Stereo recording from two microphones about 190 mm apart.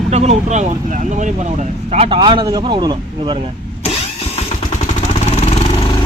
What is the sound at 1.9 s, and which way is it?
Speech, 30° right (ahead or behind).